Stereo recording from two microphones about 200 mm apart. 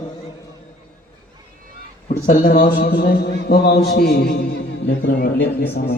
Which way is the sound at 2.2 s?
50° left (ahead or behind).